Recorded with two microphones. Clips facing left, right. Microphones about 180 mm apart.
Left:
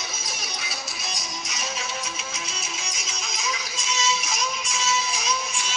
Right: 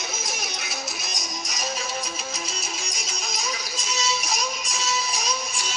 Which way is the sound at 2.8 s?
35° right (ahead or behind).